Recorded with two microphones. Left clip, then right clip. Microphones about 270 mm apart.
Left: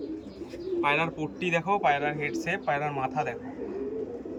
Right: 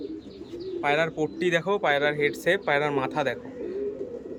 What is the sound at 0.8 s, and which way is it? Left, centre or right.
Speech, centre.